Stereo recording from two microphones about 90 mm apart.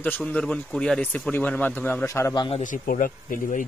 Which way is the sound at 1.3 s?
20° left (ahead or behind).